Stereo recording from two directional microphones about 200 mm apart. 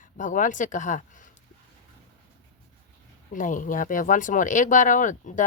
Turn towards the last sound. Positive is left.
turn(degrees=40)  # may be behind; listen again after turning